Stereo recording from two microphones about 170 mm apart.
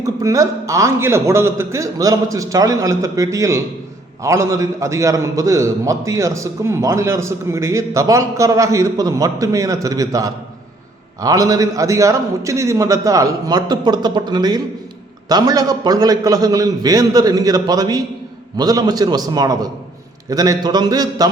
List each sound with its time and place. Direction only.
0.0 s a man's voice: 20° right (ahead or behind)